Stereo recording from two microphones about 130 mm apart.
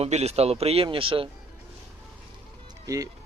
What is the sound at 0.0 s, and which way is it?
A man's voice, 55° right (ahead or behind).